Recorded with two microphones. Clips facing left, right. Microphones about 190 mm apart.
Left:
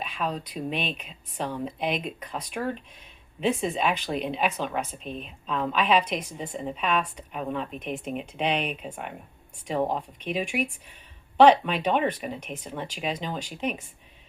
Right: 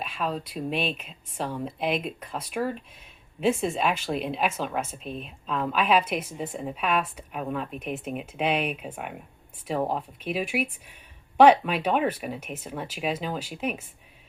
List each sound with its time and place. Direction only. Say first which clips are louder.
0.0 s speech: even; centre (ahead or behind)